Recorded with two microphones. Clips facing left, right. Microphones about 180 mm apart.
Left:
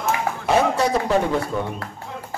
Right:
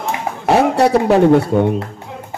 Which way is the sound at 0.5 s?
65° right (ahead or behind).